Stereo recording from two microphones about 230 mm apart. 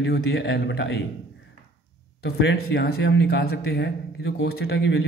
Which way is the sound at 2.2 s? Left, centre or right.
Left.